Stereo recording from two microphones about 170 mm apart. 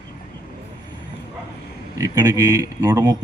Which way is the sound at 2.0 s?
20° right (ahead or behind).